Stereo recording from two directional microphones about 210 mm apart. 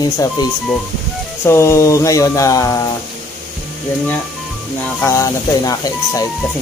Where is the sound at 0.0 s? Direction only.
20° left (ahead or behind).